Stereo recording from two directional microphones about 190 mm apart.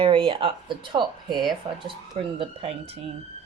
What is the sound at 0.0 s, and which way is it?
A woman's voice, 30° right (ahead or behind).